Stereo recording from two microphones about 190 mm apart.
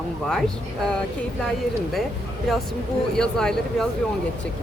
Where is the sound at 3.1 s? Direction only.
5° left (ahead or behind).